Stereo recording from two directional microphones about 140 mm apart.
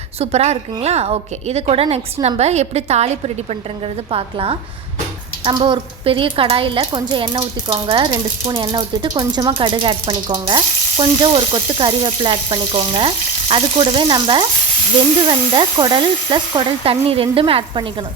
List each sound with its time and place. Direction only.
0.2 s a woman's voice: 50° right (ahead or behind)